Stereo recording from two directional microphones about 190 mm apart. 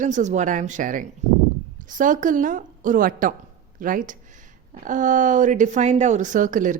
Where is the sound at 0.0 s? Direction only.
40° right (ahead or behind).